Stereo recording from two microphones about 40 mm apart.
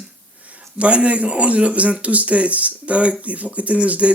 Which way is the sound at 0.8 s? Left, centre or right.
Right.